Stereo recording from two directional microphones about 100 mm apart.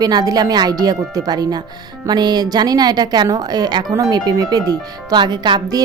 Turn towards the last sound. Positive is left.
turn(degrees=-45)  # may be behind; listen again after turning